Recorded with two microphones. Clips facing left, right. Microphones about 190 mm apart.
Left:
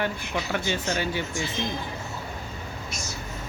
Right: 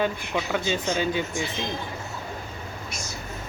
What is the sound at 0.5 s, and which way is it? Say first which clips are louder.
Speech: right 2 dB; 20° right (ahead or behind).